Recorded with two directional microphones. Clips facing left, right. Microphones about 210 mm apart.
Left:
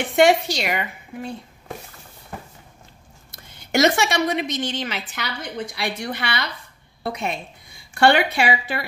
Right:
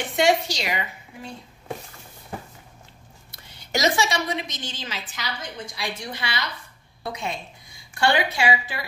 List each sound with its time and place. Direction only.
0.1 s a woman's voice: 55° left (ahead or behind)
3.3 s a woman's voice: 60° left (ahead or behind)